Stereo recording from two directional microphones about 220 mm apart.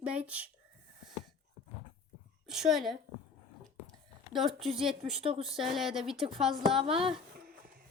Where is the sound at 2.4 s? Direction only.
Centre (ahead or behind).